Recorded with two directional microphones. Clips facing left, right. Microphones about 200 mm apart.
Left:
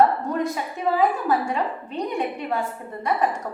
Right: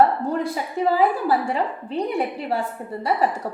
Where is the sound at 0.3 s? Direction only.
30° right (ahead or behind).